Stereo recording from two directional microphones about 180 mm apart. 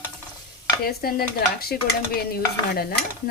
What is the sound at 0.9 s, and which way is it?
Stir, 55° left (ahead or behind).